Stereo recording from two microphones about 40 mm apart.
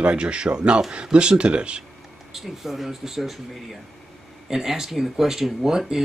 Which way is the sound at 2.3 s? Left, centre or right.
Centre.